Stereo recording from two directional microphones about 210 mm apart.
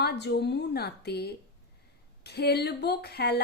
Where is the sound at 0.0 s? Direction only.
50° left (ahead or behind).